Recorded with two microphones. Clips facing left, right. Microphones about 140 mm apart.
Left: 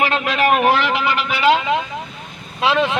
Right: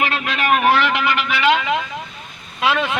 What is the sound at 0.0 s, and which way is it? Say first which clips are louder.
A man's voice: left 4 dB; 30° left (ahead or behind).